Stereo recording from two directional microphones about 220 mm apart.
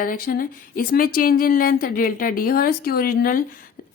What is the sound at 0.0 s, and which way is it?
A woman's voice, 40° left (ahead or behind).